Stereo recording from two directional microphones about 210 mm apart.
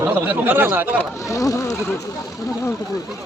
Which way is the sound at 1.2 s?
15° left (ahead or behind).